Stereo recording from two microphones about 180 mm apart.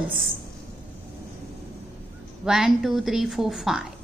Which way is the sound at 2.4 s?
5° right (ahead or behind).